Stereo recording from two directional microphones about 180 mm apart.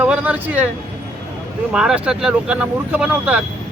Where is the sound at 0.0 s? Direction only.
10° right (ahead or behind).